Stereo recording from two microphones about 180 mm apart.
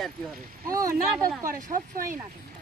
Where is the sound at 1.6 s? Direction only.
50° right (ahead or behind).